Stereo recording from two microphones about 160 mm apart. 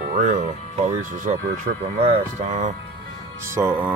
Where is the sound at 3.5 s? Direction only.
15° right (ahead or behind).